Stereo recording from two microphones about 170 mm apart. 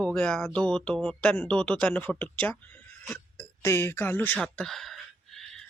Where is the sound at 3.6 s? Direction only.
15° left (ahead or behind).